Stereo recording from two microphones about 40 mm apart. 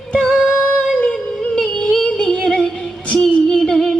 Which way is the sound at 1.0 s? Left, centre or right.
Left.